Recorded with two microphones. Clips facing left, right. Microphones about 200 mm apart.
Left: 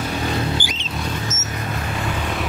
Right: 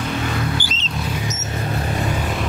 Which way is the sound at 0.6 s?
15° left (ahead or behind).